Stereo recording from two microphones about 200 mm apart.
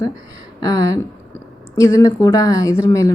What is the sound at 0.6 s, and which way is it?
A woman's voice, 15° left (ahead or behind).